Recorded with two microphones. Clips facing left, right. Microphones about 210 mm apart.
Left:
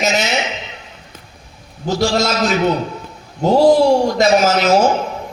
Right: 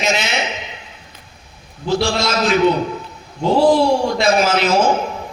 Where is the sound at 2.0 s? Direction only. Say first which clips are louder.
Left 5 dB; 45° left (ahead or behind).